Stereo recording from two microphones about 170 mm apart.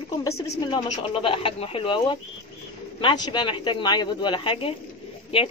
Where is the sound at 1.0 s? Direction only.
30° left (ahead or behind).